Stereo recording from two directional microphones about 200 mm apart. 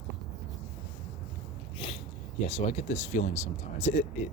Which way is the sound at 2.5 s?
30° left (ahead or behind).